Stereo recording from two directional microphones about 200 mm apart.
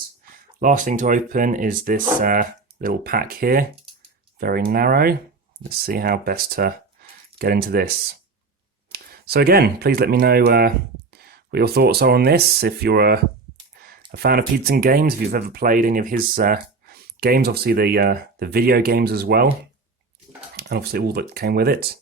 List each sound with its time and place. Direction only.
0.6 s speech: 40° right (ahead or behind)
13.7 s a sound: 50° right (ahead or behind)
14.1 s speech: 50° right (ahead or behind)
20.6 s speech: 55° right (ahead or behind)